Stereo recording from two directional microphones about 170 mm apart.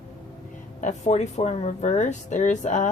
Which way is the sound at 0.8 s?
45° left (ahead or behind).